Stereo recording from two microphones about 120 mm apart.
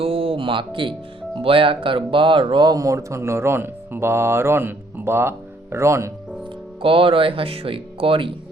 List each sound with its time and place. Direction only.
0.0 s music: 50° right (ahead or behind)
1.4 s speech: 50° right (ahead or behind); by 6.1 s 25° right (ahead or behind)
6.8 s speech: 50° right (ahead or behind)